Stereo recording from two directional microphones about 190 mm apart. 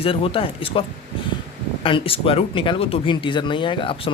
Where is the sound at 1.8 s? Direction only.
30° left (ahead or behind).